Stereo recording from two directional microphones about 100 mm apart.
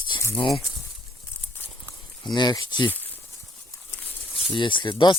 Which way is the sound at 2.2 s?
45° left (ahead or behind).